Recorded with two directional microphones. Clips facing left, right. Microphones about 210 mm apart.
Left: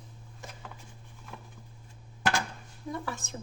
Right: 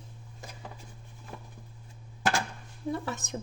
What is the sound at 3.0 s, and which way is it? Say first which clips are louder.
Speech: right 3 dB; 20° right (ahead or behind).